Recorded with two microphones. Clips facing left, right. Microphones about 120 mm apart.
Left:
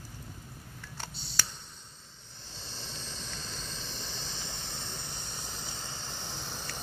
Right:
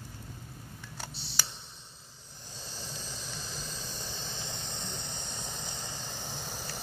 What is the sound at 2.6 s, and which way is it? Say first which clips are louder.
Vehicle: right 1 dB; 10° right (ahead or behind).